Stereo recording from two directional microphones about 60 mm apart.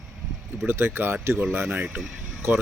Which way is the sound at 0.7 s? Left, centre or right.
Right.